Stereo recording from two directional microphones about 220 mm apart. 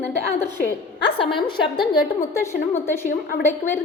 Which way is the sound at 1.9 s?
15° left (ahead or behind).